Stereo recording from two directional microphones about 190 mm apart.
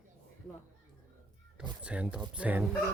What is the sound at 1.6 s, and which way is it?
Speech, 5° right (ahead or behind).